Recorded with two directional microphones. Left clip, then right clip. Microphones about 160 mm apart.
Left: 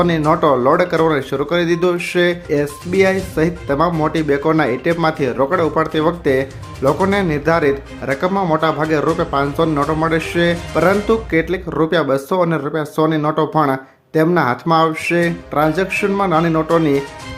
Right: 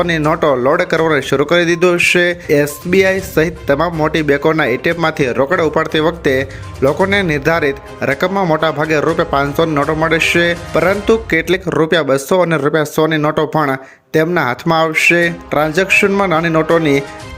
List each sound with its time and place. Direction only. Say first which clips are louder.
0.0 s speech: right 1 dB; 20° right (ahead or behind)